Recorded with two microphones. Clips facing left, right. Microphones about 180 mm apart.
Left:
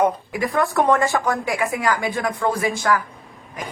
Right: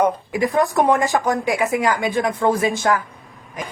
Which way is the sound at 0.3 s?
20° right (ahead or behind).